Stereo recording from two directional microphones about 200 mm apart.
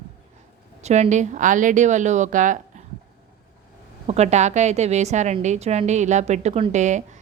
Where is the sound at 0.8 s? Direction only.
35° right (ahead or behind).